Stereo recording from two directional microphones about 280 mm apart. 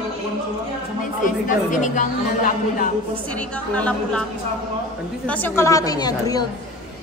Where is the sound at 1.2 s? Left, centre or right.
Left.